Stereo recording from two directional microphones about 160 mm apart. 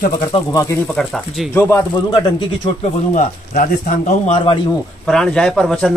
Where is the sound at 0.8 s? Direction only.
Centre (ahead or behind).